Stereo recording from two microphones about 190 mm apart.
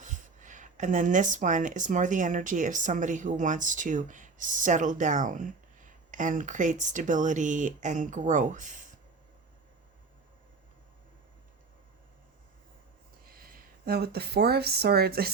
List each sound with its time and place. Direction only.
0.0 s speech: 40° right (ahead or behind)
13.3 s speech: 50° right (ahead or behind)